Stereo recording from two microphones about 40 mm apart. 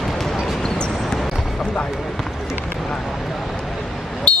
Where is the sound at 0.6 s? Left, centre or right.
Centre.